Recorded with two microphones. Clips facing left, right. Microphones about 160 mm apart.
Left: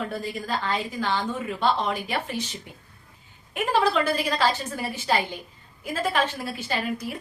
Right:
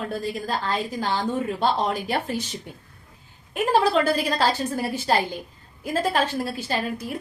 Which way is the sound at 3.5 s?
40° right (ahead or behind).